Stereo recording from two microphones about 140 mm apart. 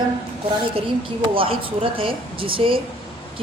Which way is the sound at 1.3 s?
40° right (ahead or behind).